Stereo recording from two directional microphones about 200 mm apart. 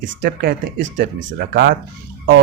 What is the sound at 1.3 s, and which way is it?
Speech, 50° right (ahead or behind).